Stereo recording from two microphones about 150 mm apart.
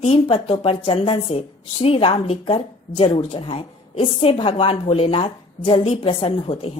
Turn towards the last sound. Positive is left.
turn(degrees=40)  # may be behind; listen again after turning